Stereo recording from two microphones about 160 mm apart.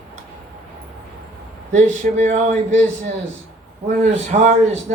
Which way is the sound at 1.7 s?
50° right (ahead or behind).